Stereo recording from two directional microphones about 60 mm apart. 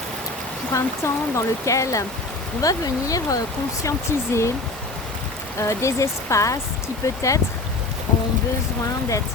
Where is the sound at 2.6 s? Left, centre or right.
Left.